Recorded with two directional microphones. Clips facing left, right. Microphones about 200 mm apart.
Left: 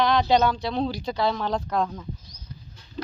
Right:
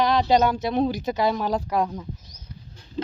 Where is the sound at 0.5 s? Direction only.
20° right (ahead or behind).